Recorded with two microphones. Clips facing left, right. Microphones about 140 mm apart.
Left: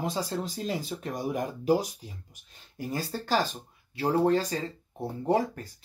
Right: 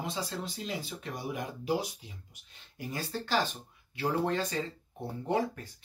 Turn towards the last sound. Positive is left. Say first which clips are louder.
# left 4 dB
turn(degrees=40)  # may be behind; listen again after turning